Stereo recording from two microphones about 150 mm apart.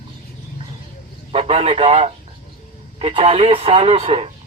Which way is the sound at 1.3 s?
40° right (ahead or behind).